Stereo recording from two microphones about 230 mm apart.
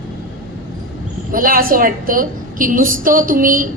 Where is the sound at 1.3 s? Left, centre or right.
Right.